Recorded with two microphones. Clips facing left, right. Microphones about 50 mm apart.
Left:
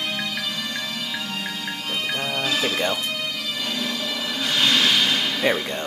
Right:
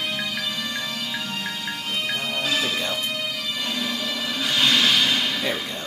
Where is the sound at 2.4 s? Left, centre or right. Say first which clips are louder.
Left 1 dB; centre.